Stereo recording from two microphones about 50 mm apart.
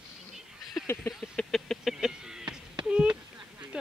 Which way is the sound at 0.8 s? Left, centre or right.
Centre.